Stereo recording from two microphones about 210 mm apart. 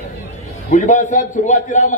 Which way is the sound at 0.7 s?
35° left (ahead or behind).